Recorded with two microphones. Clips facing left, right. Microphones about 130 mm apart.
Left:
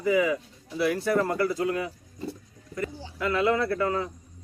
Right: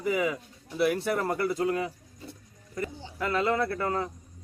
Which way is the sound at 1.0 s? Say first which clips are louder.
Left 3 dB; 25° right (ahead or behind).